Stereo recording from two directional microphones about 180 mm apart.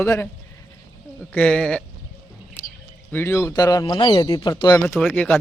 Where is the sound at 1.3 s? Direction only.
5° left (ahead or behind).